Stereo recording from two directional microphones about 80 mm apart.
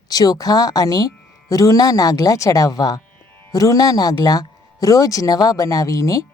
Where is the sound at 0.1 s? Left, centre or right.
Left.